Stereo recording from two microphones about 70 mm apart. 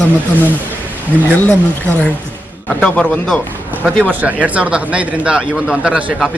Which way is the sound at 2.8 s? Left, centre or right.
Centre.